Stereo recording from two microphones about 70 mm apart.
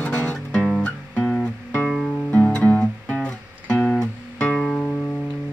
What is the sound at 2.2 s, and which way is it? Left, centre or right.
Music, centre.